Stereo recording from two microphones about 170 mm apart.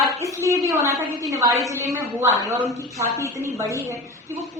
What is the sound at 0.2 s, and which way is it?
A woman's voice, 15° right (ahead or behind).